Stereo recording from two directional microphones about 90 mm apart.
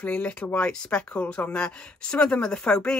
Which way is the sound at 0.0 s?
15° left (ahead or behind).